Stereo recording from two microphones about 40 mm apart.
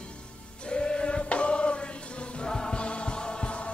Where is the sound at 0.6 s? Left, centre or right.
Left.